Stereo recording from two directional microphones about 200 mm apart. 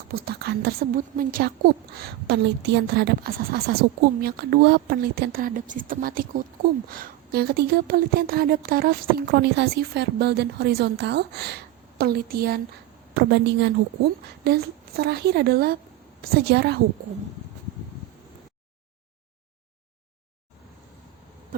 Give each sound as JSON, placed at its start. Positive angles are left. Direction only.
{"t": 0.1, "sound": "a woman's voice", "side_deg": -50}